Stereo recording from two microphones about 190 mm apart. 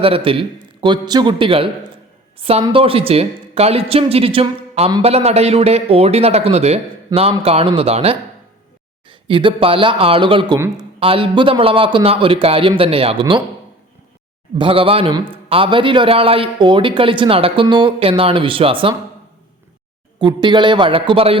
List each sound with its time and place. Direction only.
0.0 s a man's voice: 30° right (ahead or behind)
9.2 s a man's voice: 25° right (ahead or behind)
14.6 s a man's voice: 30° right (ahead or behind)
20.1 s a man's voice: 25° right (ahead or behind)